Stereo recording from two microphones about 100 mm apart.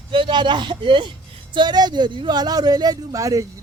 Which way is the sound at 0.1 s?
55° right (ahead or behind).